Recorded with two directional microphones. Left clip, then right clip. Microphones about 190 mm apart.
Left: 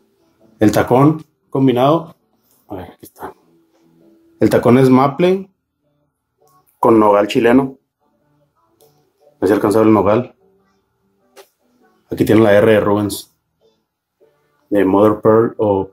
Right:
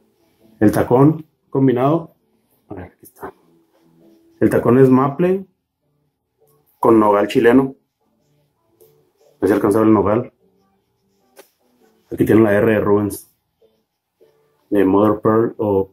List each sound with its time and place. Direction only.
0.6 s speech: 10° left (ahead or behind)
4.4 s speech: 20° left (ahead or behind)
6.8 s speech: 15° left (ahead or behind)
9.4 s speech: 15° left (ahead or behind)
12.3 s speech: 20° left (ahead or behind)
14.7 s speech: 20° left (ahead or behind)